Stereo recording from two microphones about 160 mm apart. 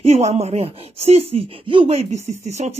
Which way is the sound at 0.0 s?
40° right (ahead or behind).